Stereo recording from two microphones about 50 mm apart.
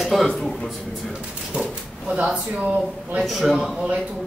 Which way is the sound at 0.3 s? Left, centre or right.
Centre.